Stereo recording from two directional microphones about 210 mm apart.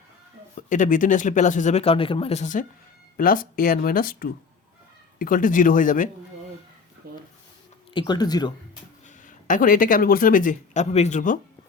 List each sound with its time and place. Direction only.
0.5 s speech: 40° left (ahead or behind)
7.0 s a sound: 45° right (ahead or behind)
7.9 s speech: 20° left (ahead or behind)
9.0 s speech: 40° left (ahead or behind)